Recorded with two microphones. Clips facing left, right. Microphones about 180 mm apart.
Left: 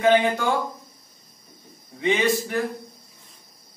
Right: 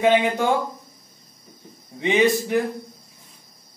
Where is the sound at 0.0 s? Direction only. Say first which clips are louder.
Right 1 dB; 15° right (ahead or behind).